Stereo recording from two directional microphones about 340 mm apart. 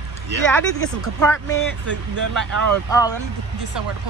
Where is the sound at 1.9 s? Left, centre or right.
Right.